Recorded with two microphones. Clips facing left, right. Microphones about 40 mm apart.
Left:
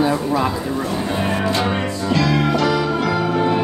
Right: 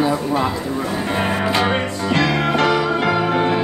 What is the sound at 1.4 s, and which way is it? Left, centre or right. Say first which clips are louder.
Music: right 2 dB; right.